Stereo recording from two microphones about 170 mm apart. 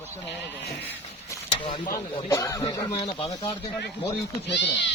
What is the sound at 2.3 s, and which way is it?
Speech, 20° left (ahead or behind).